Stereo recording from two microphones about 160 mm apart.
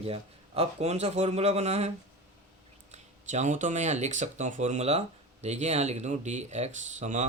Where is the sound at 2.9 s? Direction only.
45° right (ahead or behind).